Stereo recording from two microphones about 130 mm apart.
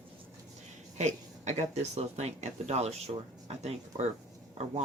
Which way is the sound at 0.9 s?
60° right (ahead or behind).